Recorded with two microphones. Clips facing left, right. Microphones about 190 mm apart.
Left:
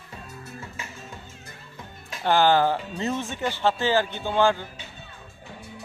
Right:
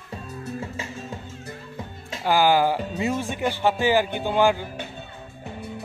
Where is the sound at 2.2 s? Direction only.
10° right (ahead or behind).